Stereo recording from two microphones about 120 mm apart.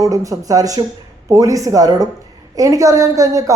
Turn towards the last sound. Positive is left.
turn(degrees=-30)  # may be behind; listen again after turning